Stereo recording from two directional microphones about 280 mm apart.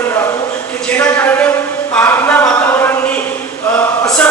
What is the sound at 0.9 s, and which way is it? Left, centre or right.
Speech, centre.